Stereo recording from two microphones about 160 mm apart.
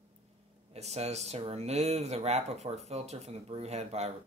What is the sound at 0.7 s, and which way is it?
Speech, 40° right (ahead or behind).